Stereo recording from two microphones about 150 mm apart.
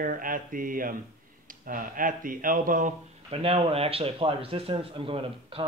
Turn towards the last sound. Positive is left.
turn(degrees=-35)  # may be behind; listen again after turning